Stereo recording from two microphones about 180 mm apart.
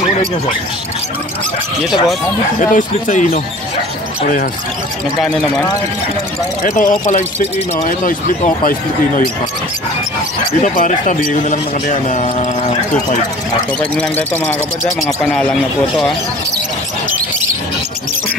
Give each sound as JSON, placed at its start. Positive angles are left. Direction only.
{"t": 2.7, "sound": "speech", "side_deg": 45}
{"t": 5.2, "sound": "speech", "side_deg": 0}
{"t": 6.6, "sound": "speech", "side_deg": 45}
{"t": 10.6, "sound": "speech", "side_deg": 45}
{"t": 13.9, "sound": "speech", "side_deg": 10}